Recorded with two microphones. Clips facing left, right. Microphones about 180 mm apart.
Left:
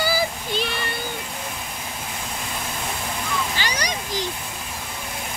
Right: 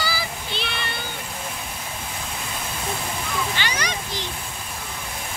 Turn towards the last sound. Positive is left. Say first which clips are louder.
# even
turn(degrees=40)  # may be behind; listen again after turning